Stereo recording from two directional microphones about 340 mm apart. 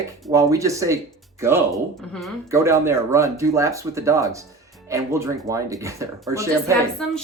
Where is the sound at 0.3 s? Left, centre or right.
Centre.